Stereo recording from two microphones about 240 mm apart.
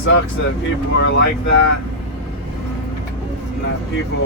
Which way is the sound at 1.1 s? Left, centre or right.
Left.